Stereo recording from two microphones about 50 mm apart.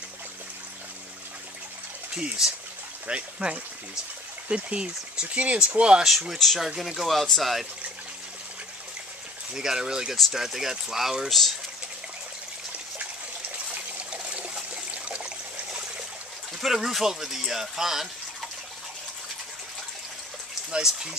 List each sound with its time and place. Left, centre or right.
2.1 s speech: centre
6.3 s speech: centre
9.5 s speech: centre
13.9 s trickle: right
16.6 s speech: centre
20.7 s speech: centre